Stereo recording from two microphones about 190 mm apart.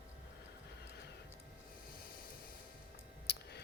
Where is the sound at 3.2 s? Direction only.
60° left (ahead or behind).